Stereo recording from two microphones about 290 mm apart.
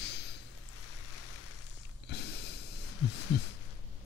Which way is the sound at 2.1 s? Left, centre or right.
Left.